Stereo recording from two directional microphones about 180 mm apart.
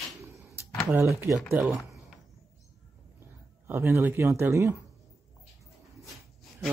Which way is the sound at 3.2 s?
15° right (ahead or behind).